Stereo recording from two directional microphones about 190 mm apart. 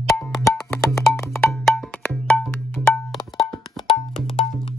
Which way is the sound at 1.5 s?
Centre (ahead or behind).